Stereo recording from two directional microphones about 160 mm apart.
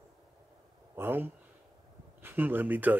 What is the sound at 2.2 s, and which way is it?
Speech, 10° right (ahead or behind).